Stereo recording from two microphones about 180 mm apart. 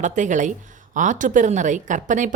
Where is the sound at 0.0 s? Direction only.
40° right (ahead or behind).